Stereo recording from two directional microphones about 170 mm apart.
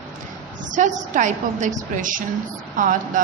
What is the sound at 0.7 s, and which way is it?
A woman's voice, 45° right (ahead or behind).